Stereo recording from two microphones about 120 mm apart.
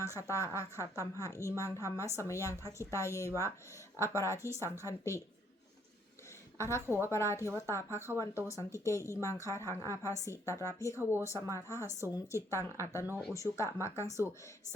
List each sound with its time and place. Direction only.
0.0 s speech: 25° left (ahead or behind)
6.6 s speech: 25° left (ahead or behind)